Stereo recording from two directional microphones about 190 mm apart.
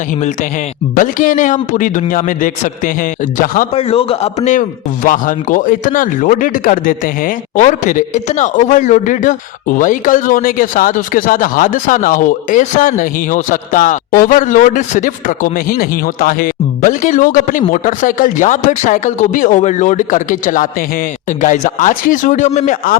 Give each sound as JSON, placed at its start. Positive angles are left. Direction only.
{"t": 0.9, "sound": "speech", "side_deg": 45}
{"t": 3.8, "sound": "speech", "side_deg": 30}